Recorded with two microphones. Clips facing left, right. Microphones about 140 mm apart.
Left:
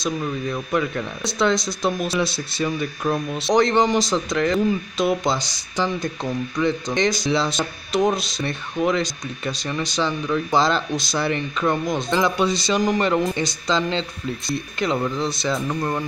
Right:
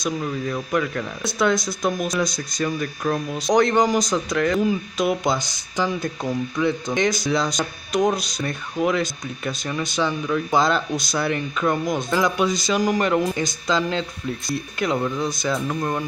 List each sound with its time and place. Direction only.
0.0 s speech: centre (ahead or behind)
2.2 s speech: 30° left (ahead or behind)
2.6 s speech: 5° left (ahead or behind)